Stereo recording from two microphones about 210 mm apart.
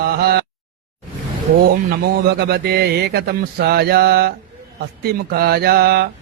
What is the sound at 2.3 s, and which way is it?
Speech, 50° right (ahead or behind).